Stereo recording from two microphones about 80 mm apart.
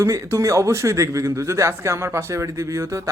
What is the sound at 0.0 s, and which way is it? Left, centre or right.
A man's voice, right.